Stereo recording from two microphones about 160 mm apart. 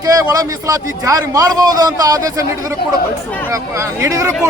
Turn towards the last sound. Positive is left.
turn(degrees=-20)  # may be behind; listen again after turning